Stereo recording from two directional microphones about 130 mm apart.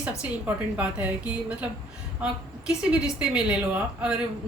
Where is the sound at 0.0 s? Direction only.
10° right (ahead or behind).